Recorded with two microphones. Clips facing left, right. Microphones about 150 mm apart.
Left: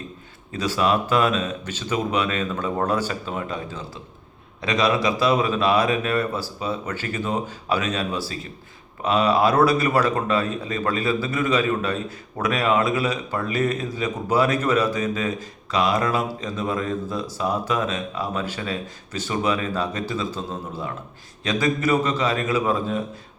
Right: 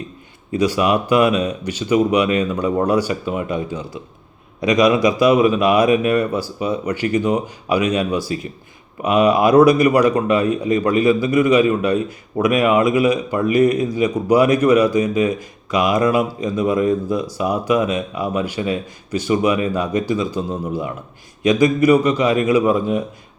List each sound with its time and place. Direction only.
0.5 s a man's voice: 15° right (ahead or behind)